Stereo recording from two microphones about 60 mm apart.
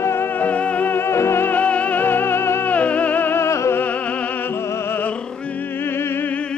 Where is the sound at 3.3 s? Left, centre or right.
Left.